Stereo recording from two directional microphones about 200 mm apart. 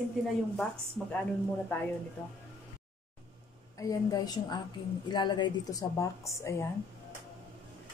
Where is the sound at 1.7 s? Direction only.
10° left (ahead or behind).